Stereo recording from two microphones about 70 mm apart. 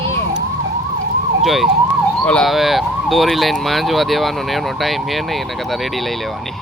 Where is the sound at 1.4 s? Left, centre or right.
Centre.